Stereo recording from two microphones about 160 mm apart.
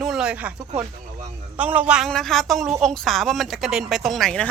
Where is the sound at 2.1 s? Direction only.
Centre (ahead or behind).